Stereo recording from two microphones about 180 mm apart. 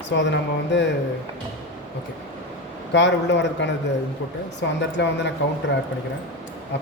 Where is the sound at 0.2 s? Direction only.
80° left.